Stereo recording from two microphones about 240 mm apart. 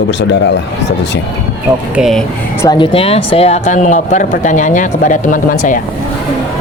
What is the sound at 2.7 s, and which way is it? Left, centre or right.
Speech, left.